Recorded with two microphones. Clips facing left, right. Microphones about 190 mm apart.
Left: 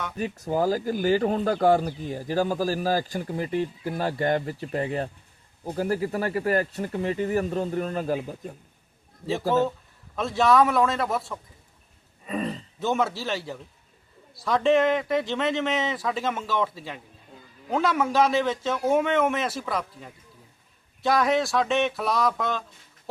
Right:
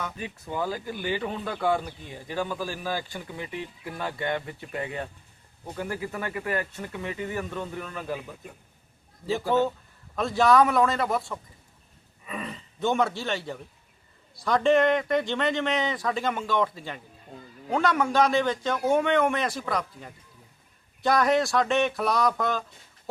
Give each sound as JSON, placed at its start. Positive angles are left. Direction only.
{"t": 0.2, "sound": "speech", "side_deg": 45}
{"t": 9.5, "sound": "speech", "side_deg": 0}
{"t": 12.2, "sound": "a sound", "side_deg": 35}
{"t": 12.8, "sound": "speech", "side_deg": 0}